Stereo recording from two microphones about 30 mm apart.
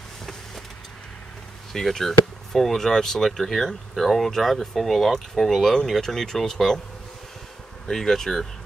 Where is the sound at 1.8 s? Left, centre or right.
Centre.